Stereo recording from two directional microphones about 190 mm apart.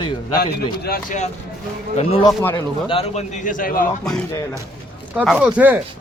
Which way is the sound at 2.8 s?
30° left (ahead or behind).